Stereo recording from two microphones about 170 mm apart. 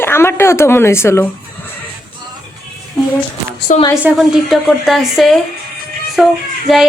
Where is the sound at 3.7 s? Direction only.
50° left (ahead or behind).